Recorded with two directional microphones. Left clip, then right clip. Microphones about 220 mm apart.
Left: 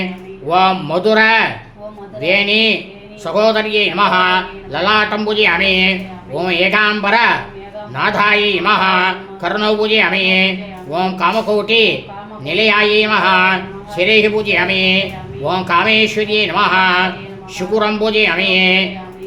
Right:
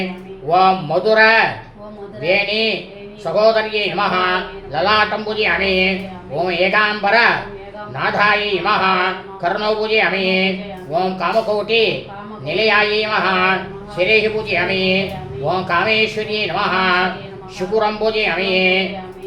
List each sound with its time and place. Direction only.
0.4 s speech: 50° left (ahead or behind)